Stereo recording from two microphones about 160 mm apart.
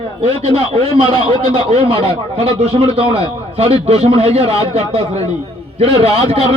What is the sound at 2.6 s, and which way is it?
A man's voice, 35° right (ahead or behind).